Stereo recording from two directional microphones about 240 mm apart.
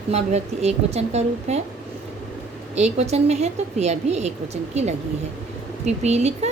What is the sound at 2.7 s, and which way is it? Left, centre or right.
A woman's voice, right.